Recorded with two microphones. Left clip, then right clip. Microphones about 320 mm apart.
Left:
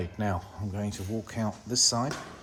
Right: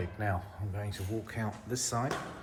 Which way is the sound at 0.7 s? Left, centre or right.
Left.